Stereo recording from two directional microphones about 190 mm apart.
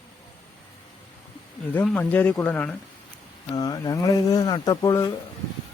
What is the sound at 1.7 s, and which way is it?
Speech, 5° left (ahead or behind).